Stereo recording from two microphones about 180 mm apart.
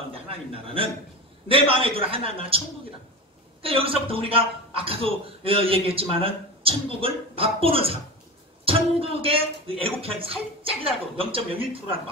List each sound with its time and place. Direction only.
0.1 s a man's voice: 30° right (ahead or behind)
3.6 s a man's voice: 30° right (ahead or behind)